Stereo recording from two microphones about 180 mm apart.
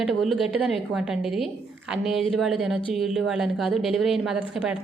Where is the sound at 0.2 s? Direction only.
Centre (ahead or behind).